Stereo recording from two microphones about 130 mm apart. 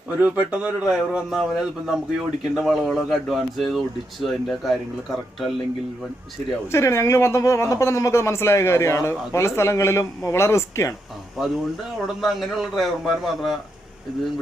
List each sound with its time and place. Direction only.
0.2 s a man's voice: 10° right (ahead or behind)
6.7 s speech: 20° left (ahead or behind)
11.4 s speech: 5° right (ahead or behind)